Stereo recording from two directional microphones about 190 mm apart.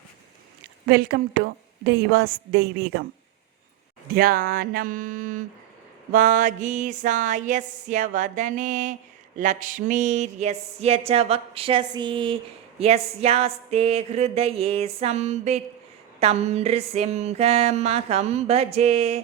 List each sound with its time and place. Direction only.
0.9 s a woman's voice: 55° right (ahead or behind)
4.1 s speech: 50° right (ahead or behind)
6.1 s a sound: 45° right (ahead or behind)